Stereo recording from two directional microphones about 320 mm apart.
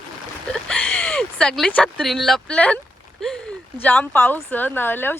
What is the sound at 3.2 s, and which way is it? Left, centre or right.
A woman's voice, centre.